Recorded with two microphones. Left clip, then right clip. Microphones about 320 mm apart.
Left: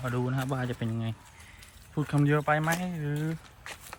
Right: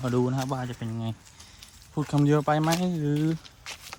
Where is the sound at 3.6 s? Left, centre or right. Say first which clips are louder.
Right 3 dB; centre.